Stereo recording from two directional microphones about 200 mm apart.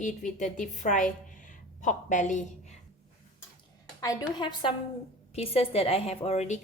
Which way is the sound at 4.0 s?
20° left (ahead or behind).